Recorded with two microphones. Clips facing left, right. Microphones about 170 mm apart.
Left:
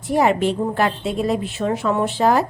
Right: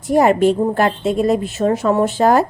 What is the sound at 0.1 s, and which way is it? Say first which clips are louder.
A woman's voice: right 5 dB; 45° right (ahead or behind).